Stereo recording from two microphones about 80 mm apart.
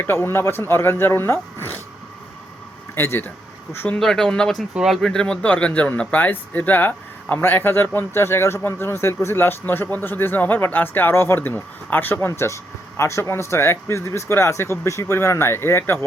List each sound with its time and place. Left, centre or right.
0.0 s speech: left
2.9 s speech: left
3.8 s speech: centre; by 16.0 s left